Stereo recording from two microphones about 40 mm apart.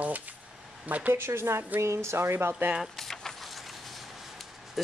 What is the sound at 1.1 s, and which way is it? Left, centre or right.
Speech, right.